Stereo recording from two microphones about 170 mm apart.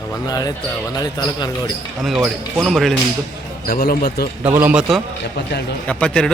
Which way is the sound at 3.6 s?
60° left (ahead or behind).